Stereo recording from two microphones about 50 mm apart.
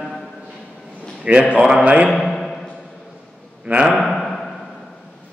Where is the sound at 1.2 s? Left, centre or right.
Right.